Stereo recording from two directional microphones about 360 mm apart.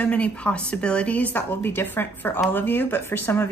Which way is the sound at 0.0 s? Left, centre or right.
Centre.